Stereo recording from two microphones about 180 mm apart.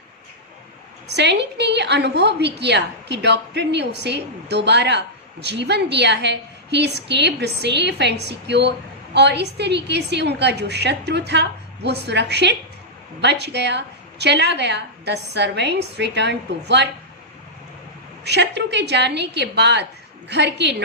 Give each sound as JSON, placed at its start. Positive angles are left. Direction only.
{"t": 1.0, "sound": "a woman's voice", "side_deg": -70}
{"t": 18.3, "sound": "a woman's voice", "side_deg": -70}